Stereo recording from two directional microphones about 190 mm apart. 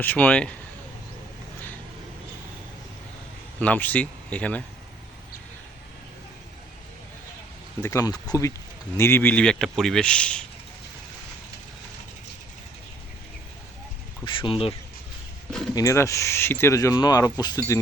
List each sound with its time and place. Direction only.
0.0 s speech: 10° left (ahead or behind)
3.6 s speech: 10° left (ahead or behind)
7.8 s speech: 15° left (ahead or behind)
14.3 s speech: 25° left (ahead or behind)
15.4 s speech: 5° left (ahead or behind)
15.7 s speech: 15° left (ahead or behind)